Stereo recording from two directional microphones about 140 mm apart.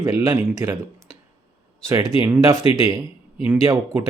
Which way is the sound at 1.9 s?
20° right (ahead or behind).